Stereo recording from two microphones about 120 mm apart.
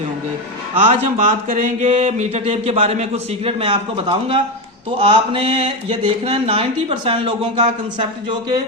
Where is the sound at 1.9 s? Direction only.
60° right (ahead or behind).